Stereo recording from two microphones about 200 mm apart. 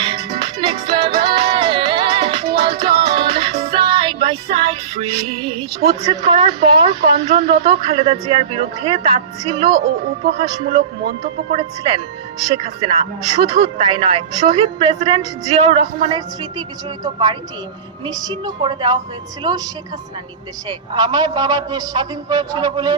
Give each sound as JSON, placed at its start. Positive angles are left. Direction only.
{"t": 0.0, "sound": "music", "side_deg": -25}
{"t": 9.7, "sound": "speech", "side_deg": -50}
{"t": 10.7, "sound": "speech", "side_deg": -30}
{"t": 13.3, "sound": "a woman's voice", "side_deg": -25}
{"t": 18.0, "sound": "a woman's voice", "side_deg": -20}
{"t": 20.7, "sound": "a woman's voice", "side_deg": -20}